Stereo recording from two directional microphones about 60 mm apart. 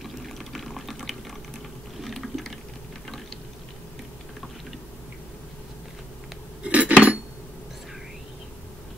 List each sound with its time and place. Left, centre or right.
0.0 s fill: centre
2.0 s water: centre
6.6 s cutlery: right